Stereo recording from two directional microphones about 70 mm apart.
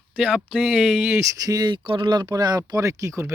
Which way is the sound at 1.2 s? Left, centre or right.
Right.